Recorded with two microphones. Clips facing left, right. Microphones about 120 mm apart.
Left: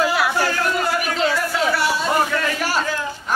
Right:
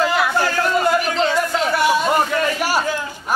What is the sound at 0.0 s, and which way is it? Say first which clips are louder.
Chatter: right 1 dB; 5° left (ahead or behind).